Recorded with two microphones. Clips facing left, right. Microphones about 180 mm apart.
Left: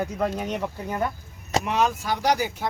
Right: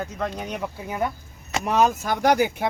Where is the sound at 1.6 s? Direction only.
45° right (ahead or behind).